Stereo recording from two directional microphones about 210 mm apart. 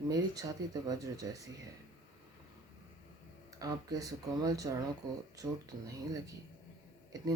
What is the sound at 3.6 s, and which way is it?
Speech, 15° right (ahead or behind).